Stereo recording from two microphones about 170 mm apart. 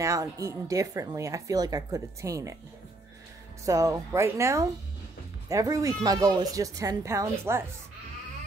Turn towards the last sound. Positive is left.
turn(degrees=-15)  # may be behind; listen again after turning